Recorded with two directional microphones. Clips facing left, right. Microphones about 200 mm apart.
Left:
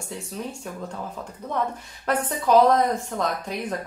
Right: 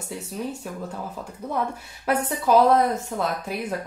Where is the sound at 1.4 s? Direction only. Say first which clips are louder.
Even; 10° right (ahead or behind).